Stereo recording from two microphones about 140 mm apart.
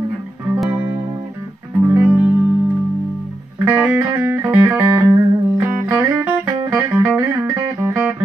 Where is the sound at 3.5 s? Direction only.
10° right (ahead or behind).